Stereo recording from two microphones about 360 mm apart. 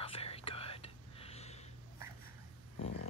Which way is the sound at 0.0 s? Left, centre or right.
Centre.